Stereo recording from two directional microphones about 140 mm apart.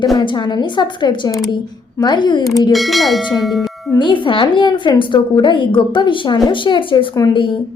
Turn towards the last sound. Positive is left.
turn(degrees=35)  # may be behind; listen again after turning